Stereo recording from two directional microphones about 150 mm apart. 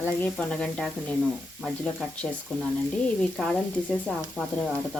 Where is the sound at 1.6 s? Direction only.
5° left (ahead or behind).